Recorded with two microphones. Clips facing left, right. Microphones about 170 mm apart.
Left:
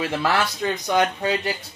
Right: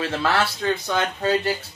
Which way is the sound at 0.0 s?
15° left (ahead or behind).